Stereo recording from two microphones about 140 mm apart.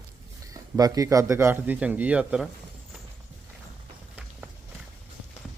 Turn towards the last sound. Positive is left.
turn(degrees=-10)  # may be behind; listen again after turning